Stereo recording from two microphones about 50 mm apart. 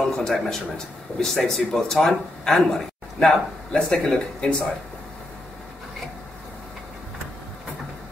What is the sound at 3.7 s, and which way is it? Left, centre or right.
Speech, centre.